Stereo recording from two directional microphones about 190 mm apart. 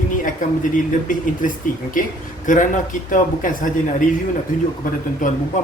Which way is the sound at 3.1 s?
45° left (ahead or behind).